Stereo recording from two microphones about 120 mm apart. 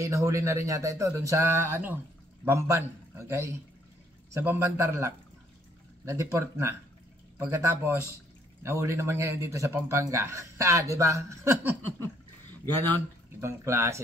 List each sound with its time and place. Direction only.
0.0 s speech: 25° right (ahead or behind)
13.4 s speech: 20° right (ahead or behind)